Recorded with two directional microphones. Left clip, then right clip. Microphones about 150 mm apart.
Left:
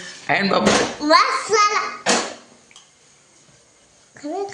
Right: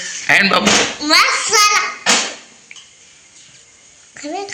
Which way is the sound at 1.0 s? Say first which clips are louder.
Even; 60° left (ahead or behind).